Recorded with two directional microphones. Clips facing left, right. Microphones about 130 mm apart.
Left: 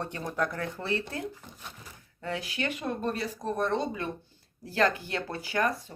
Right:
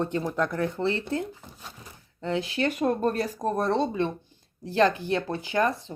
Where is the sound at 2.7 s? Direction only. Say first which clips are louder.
Right 7 dB; 40° right (ahead or behind).